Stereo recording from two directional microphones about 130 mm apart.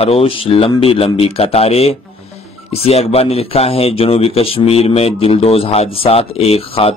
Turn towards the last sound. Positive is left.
turn(degrees=45)  # may be behind; listen again after turning